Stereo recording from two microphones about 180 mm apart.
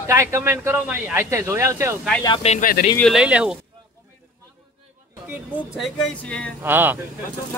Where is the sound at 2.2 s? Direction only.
30° left (ahead or behind).